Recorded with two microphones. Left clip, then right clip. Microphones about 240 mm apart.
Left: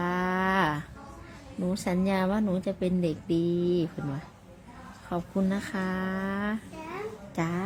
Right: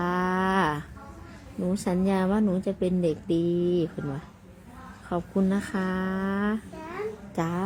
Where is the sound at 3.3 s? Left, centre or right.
Left.